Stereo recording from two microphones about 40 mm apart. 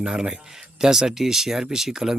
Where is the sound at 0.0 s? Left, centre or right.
Centre.